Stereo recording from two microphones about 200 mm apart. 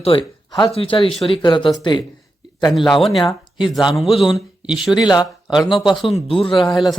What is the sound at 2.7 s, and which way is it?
Speech, centre (ahead or behind).